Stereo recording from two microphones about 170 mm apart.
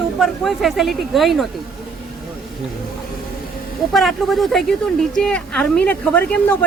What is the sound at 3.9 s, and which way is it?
A woman's voice, centre (ahead or behind).